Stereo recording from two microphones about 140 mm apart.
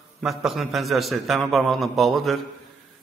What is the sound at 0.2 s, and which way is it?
A man's voice, centre (ahead or behind).